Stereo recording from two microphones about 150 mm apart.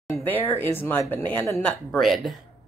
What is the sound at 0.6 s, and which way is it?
Speech, 15° left (ahead or behind).